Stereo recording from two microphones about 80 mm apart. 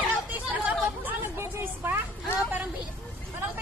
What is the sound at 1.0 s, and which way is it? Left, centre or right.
Vehicle, right.